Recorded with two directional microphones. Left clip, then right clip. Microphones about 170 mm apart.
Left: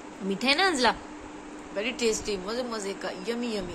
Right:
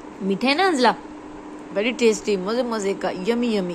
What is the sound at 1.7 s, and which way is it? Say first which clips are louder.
Speech: right 8 dB; 35° right (ahead or behind).